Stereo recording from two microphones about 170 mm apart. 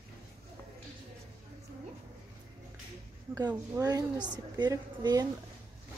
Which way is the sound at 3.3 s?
20° right (ahead or behind).